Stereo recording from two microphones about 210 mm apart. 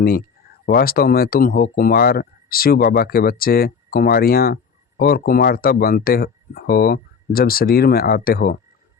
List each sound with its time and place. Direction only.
0.6 s speech: 45° left (ahead or behind)